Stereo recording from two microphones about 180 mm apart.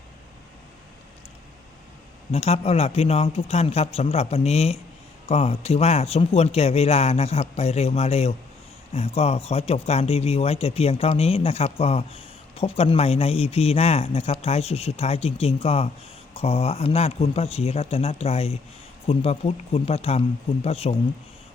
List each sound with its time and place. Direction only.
2.3 s speech: 35° left (ahead or behind)